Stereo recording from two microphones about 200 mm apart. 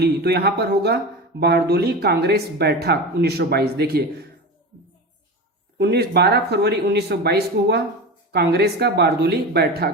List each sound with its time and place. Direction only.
0.0 s speech: 50° right (ahead or behind)
5.7 s speech: 55° right (ahead or behind)